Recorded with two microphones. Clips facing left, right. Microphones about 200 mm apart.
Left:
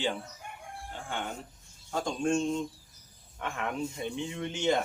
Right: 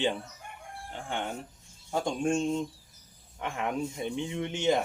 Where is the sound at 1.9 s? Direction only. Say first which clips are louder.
Right 1 dB; 10° right (ahead or behind).